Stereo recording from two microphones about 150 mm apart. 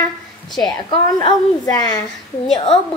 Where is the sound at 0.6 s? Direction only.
30° left (ahead or behind).